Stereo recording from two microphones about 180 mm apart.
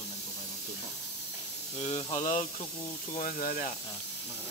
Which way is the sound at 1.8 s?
35° left (ahead or behind).